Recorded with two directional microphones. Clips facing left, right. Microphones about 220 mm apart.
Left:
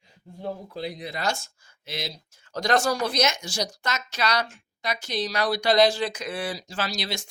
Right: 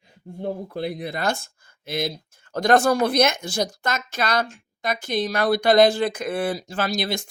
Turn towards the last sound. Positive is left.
turn(degrees=-55)  # may be behind; listen again after turning